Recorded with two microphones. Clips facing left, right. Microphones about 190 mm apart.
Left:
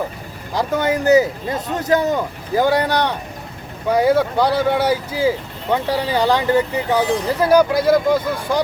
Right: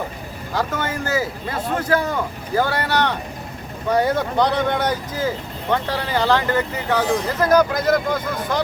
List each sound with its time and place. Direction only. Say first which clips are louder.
0.5 s speech: left 5 dB; 15° left (ahead or behind)